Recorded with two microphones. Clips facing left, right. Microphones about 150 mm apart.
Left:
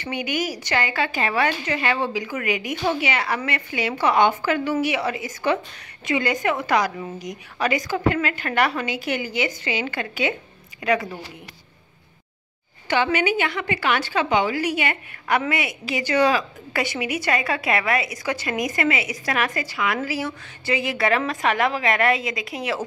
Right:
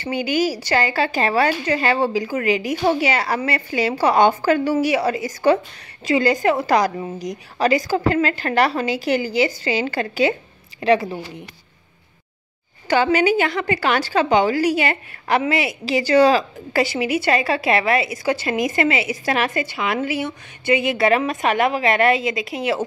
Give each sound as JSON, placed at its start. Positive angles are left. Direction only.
{"t": 0.0, "sound": "a woman's voice", "side_deg": -30}
{"t": 12.8, "sound": "a woman's voice", "side_deg": -40}